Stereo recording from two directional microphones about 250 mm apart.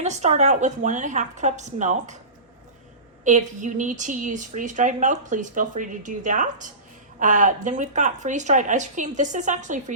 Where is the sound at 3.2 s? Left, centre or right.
Right.